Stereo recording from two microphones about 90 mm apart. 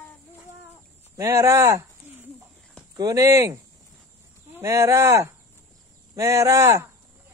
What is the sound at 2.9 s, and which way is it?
Speech, 40° right (ahead or behind).